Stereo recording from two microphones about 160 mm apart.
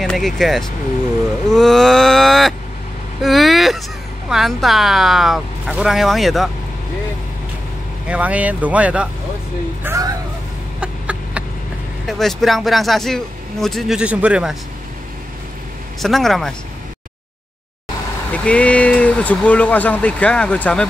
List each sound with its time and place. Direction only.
0.0 s speech: 5° left (ahead or behind)
3.2 s vehicle: centre (ahead or behind)
4.3 s speech: centre (ahead or behind)
8.1 s speech: 10° right (ahead or behind)
9.8 s speech: 20° right (ahead or behind)
10.8 s chicken: 10° right (ahead or behind)
12.1 s speech: centre (ahead or behind)
16.0 s speech: centre (ahead or behind)
18.3 s speech: 10° left (ahead or behind)